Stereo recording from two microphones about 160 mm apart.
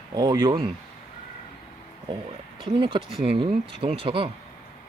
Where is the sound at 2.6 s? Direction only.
30° right (ahead or behind).